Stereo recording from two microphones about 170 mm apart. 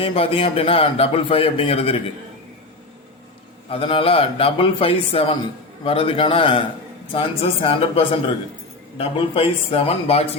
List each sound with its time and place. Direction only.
0.0 s a man's voice: 35° left (ahead or behind)
3.7 s a man's voice: 30° left (ahead or behind)